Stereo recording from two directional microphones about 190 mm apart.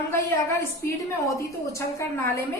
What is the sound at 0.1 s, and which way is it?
A woman's voice, 15° left (ahead or behind).